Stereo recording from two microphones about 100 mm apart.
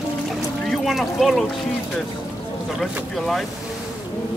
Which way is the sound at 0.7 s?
Centre (ahead or behind).